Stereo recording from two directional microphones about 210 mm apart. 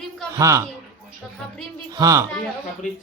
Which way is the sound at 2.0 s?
15° right (ahead or behind).